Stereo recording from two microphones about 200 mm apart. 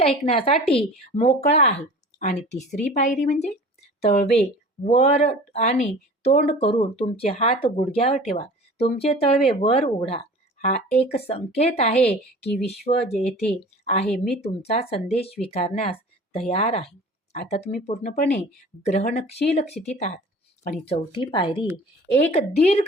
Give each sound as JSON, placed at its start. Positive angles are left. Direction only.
{"t": 0.0, "sound": "a woman's voice", "side_deg": 30}
{"t": 17.6, "sound": "speech", "side_deg": 50}
{"t": 17.8, "sound": "a woman's voice", "side_deg": 30}